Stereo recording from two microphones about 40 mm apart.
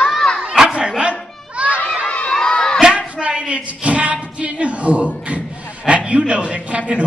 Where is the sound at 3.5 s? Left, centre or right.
Right.